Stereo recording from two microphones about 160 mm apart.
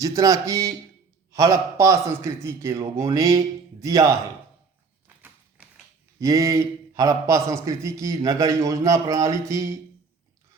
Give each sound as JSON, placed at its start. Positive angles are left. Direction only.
{"t": 0.0, "sound": "a man's voice", "side_deg": -20}
{"t": 5.0, "sound": "tap", "side_deg": -10}
{"t": 6.1, "sound": "a man's voice", "side_deg": -20}